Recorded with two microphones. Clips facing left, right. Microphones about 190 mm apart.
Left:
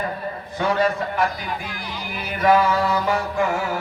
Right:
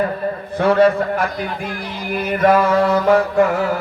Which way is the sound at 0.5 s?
60° right (ahead or behind).